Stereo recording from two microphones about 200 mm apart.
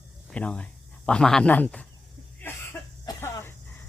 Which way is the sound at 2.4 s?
10° left (ahead or behind).